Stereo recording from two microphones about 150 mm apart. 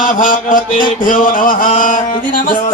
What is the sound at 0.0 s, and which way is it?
Speech, 60° left (ahead or behind).